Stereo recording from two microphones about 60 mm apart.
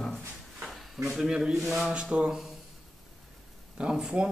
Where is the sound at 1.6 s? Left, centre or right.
Centre.